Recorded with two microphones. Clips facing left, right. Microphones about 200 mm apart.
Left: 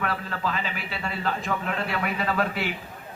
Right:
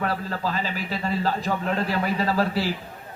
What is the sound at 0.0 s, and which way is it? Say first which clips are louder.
A man's voice: right 2 dB; 35° right (ahead or behind).